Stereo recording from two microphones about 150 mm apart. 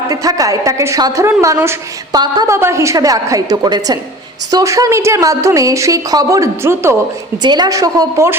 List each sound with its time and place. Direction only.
0.1 s a woman's voice: 25° right (ahead or behind)
7.4 s a woman's voice: 30° right (ahead or behind)